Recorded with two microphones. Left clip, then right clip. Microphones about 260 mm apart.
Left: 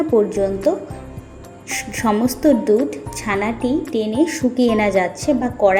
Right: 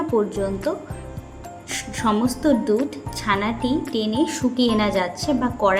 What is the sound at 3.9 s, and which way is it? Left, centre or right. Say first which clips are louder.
Music: left 3 dB; left.